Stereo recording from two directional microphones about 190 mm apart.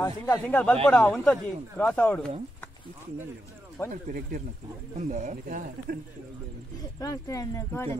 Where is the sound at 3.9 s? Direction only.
45° right (ahead or behind).